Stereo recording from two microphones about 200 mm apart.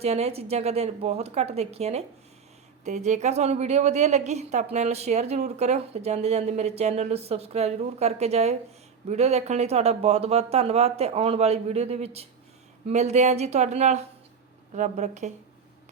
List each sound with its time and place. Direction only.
0.0 s a woman's voice: 30° right (ahead or behind)